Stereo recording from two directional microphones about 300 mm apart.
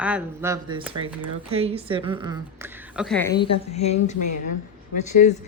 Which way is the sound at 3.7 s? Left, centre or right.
Left.